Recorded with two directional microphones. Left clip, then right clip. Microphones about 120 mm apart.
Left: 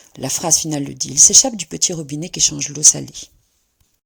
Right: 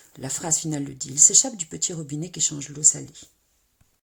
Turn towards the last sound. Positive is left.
turn(degrees=45)  # may be behind; listen again after turning